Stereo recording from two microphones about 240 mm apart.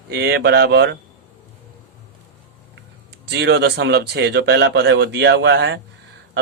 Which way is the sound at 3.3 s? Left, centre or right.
Right.